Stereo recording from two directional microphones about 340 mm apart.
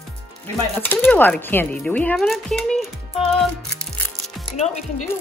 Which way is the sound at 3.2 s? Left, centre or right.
Centre.